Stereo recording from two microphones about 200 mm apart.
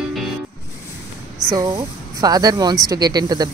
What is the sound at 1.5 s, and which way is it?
Speech, 20° right (ahead or behind).